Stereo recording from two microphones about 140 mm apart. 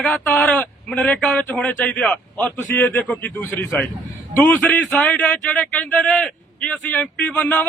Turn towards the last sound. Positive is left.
turn(degrees=10)  # may be behind; listen again after turning